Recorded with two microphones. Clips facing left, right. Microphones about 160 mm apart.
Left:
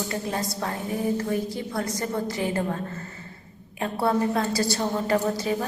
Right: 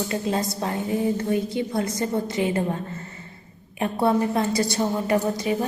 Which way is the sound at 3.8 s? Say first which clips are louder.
Right 2 dB; 20° right (ahead or behind).